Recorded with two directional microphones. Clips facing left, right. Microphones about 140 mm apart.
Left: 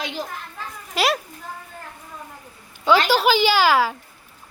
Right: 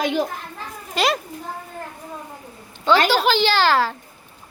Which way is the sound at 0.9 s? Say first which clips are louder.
Right 1 dB; 5° left (ahead or behind).